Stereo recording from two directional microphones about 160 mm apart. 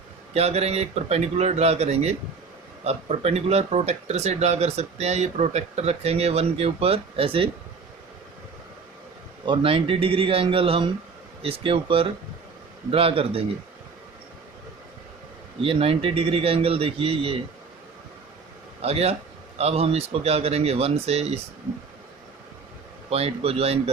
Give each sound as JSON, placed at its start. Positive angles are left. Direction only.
{"t": 0.3, "sound": "speech", "side_deg": -40}
{"t": 9.5, "sound": "speech", "side_deg": -35}
{"t": 15.6, "sound": "speech", "side_deg": -35}
{"t": 18.8, "sound": "speech", "side_deg": -40}
{"t": 23.0, "sound": "speech", "side_deg": -40}